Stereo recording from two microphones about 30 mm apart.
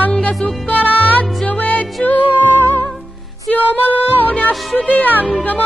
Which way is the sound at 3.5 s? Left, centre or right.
Left.